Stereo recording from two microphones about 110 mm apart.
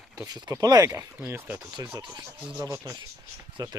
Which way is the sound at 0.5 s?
35° right (ahead or behind).